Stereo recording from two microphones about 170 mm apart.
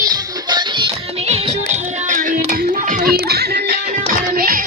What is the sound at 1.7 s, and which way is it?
Music, 50° right (ahead or behind).